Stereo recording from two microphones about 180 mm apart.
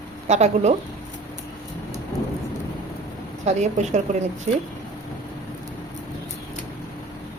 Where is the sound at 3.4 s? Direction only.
40° right (ahead or behind).